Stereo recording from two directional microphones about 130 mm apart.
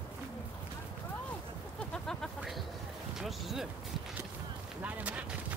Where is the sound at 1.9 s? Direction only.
5° left (ahead or behind).